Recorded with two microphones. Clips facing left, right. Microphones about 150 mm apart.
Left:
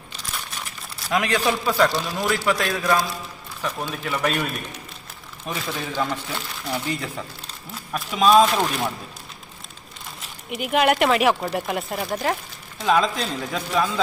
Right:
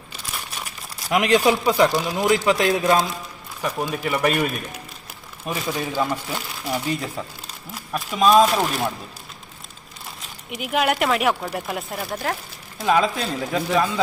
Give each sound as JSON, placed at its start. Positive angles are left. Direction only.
{"t": 1.1, "sound": "a man's voice", "side_deg": -20}
{"t": 3.6, "sound": "speech", "side_deg": -10}
{"t": 5.5, "sound": "speech", "side_deg": -10}
{"t": 8.2, "sound": "speech", "side_deg": -5}
{"t": 10.5, "sound": "speech", "side_deg": 0}